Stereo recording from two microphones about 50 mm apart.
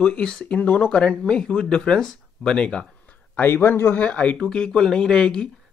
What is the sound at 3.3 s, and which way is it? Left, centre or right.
Speech, left.